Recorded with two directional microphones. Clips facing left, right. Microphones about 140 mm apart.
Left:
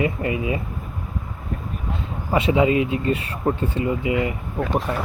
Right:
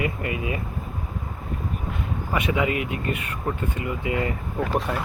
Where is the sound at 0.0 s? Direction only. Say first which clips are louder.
Left 4 dB; 25° left (ahead or behind).